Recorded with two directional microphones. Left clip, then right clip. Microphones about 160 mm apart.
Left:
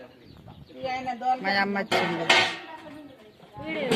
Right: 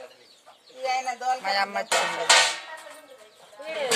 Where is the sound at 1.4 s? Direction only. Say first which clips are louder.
Even; 10° right (ahead or behind).